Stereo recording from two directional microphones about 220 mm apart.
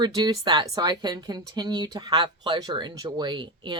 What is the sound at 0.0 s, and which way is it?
A woman's voice, 20° right (ahead or behind).